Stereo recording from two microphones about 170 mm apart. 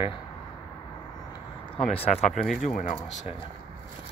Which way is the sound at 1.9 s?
35° left (ahead or behind).